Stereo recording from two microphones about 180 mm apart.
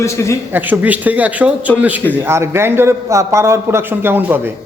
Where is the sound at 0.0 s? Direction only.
15° left (ahead or behind).